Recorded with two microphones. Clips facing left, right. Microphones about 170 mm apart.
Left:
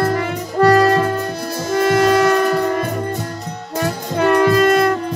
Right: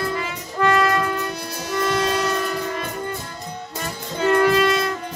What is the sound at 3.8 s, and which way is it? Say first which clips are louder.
Music: left 8 dB; 70° left (ahead or behind).